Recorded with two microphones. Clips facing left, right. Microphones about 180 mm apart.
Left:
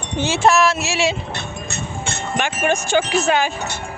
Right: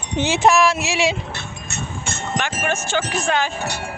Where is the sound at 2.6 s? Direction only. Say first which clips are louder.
Left 8 dB; 15° left (ahead or behind).